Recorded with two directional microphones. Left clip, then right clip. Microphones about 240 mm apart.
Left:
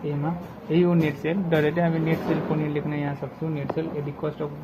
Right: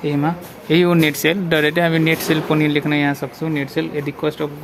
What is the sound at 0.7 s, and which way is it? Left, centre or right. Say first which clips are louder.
Speech: right 8 dB; right.